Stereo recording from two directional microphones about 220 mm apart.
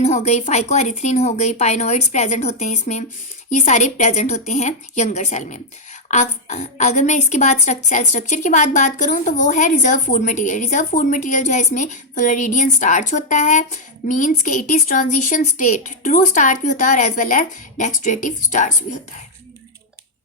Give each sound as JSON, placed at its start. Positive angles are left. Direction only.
{"t": 0.0, "sound": "a woman's voice", "side_deg": 30}